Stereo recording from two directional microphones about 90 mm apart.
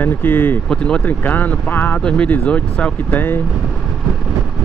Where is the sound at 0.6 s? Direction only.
10° left (ahead or behind).